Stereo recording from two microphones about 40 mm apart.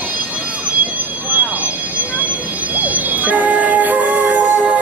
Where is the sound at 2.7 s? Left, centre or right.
Right.